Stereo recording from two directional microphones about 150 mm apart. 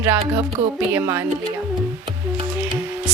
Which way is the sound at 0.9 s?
15° right (ahead or behind).